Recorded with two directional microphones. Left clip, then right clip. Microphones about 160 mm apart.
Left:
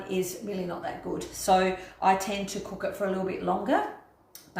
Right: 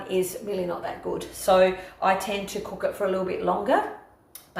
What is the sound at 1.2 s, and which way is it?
A woman's voice, 15° right (ahead or behind).